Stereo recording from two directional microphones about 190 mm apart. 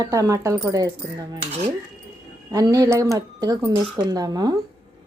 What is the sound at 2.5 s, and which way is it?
Speech, 20° right (ahead or behind).